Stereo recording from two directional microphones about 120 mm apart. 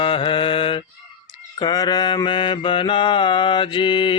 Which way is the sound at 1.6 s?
35° left (ahead or behind).